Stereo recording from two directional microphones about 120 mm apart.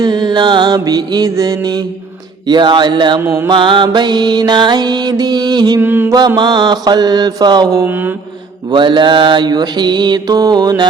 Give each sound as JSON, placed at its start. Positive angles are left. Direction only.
{"t": 0.0, "sound": "mantra", "side_deg": -35}
{"t": 3.2, "sound": "mantra", "side_deg": -25}
{"t": 3.5, "sound": "mantra", "side_deg": -40}
{"t": 5.8, "sound": "mantra", "side_deg": -15}
{"t": 6.1, "sound": "mantra", "side_deg": -35}
{"t": 7.9, "sound": "mantra", "side_deg": -15}
{"t": 8.7, "sound": "mantra", "side_deg": -40}